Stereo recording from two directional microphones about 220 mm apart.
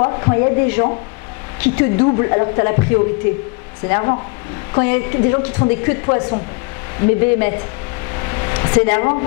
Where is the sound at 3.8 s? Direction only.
25° left (ahead or behind).